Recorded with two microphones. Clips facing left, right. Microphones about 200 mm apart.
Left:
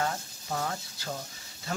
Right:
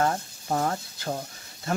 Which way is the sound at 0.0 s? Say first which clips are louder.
Right 6 dB; 50° right (ahead or behind).